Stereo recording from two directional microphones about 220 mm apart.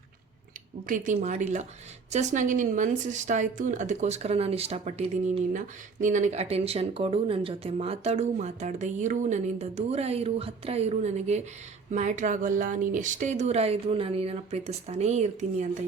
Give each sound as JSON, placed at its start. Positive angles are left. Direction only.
{"t": 0.9, "sound": "a woman's voice", "side_deg": -35}